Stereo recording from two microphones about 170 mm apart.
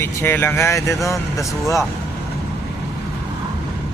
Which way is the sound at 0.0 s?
15° left (ahead or behind).